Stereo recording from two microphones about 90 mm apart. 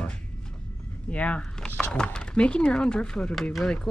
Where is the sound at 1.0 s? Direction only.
15° left (ahead or behind).